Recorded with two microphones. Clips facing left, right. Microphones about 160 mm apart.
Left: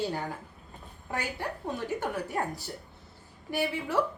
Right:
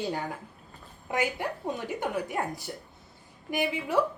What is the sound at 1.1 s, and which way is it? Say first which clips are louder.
Speech: right 5 dB; 15° right (ahead or behind).